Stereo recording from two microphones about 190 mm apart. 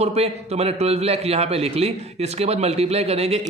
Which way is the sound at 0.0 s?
35° right (ahead or behind).